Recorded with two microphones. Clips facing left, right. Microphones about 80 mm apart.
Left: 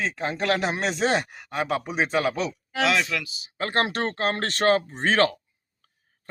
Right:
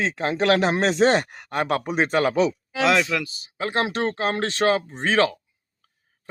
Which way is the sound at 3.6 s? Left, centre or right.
Left.